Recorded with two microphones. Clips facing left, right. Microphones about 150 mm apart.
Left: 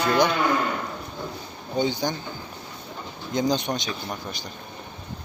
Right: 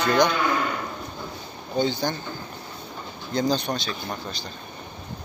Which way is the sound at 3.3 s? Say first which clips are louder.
Even; 15° left (ahead or behind).